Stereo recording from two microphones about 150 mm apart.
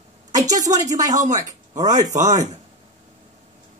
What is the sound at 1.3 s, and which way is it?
Speech, 25° right (ahead or behind).